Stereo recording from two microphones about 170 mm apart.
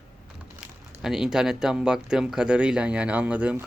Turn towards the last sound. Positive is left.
turn(degrees=-10)  # may be behind; listen again after turning